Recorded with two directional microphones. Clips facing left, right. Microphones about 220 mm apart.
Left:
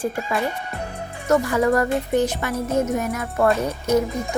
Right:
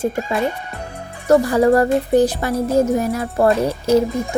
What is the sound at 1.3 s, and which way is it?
Speech, 35° right (ahead or behind).